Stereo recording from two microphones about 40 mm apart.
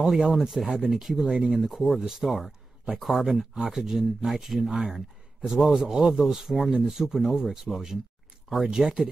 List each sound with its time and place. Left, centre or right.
0.3 s speech: centre
1.2 s speech: right
1.6 s speech: centre
3.5 s a man's voice: centre